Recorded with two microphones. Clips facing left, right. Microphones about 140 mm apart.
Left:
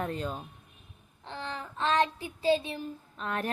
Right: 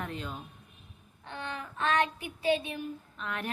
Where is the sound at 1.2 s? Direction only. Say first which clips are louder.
Left 1 dB; 30° left (ahead or behind).